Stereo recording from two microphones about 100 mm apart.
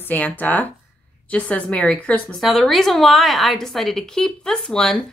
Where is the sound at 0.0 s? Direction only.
15° left (ahead or behind).